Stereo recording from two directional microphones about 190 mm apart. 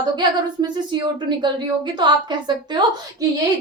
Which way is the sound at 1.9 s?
25° right (ahead or behind).